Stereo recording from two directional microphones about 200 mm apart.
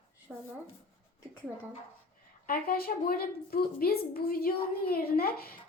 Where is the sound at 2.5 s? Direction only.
50° left (ahead or behind).